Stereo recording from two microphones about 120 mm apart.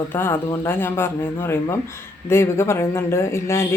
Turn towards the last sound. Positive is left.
turn(degrees=20)  # may be behind; listen again after turning